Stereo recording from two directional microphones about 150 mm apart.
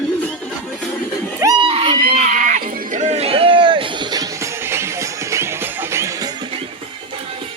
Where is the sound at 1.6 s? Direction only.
35° right (ahead or behind).